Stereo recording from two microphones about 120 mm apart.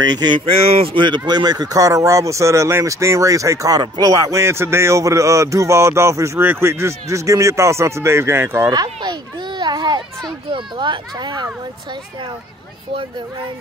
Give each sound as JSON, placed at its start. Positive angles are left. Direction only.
{"t": 0.0, "sound": "speech", "side_deg": -35}
{"t": 0.5, "sound": "speech", "side_deg": -55}
{"t": 8.7, "sound": "speech", "side_deg": -35}
{"t": 9.6, "sound": "children playing", "side_deg": -35}
{"t": 10.5, "sound": "speech", "side_deg": -40}